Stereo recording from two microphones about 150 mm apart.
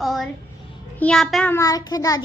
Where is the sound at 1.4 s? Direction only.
20° left (ahead or behind).